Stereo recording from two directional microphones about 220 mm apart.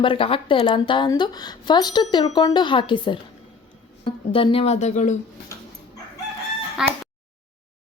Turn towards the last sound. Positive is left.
turn(degrees=-5)  # may be behind; listen again after turning